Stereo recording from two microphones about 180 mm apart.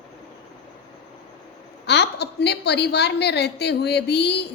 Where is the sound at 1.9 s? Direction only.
70° left (ahead or behind).